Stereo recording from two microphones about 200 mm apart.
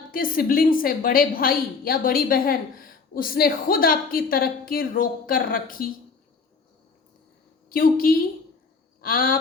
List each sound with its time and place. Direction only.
0.1 s a woman's voice: 45° left (ahead or behind)
7.7 s a woman's voice: 45° left (ahead or behind)